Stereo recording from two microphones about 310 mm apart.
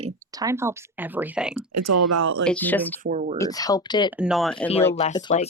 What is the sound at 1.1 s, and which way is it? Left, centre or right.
Speech, centre.